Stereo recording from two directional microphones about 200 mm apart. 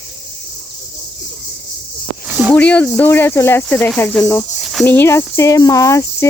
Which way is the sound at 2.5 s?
5° left (ahead or behind).